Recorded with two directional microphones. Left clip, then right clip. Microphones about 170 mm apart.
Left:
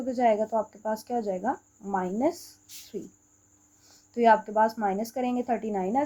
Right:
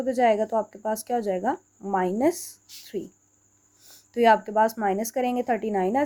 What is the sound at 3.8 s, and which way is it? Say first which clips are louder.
Speech: right 2 dB; 40° right (ahead or behind).